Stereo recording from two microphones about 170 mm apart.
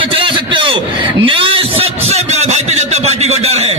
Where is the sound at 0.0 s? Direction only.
30° right (ahead or behind).